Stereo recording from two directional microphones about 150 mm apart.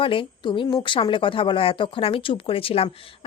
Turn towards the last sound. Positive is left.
turn(degrees=40)  # may be behind; listen again after turning